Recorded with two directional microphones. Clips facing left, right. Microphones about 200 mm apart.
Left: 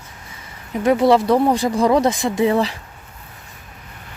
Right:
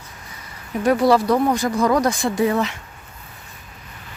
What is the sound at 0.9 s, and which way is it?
Speech, 25° left (ahead or behind).